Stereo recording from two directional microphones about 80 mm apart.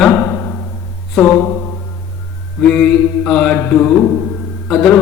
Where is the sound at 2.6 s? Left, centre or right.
Centre.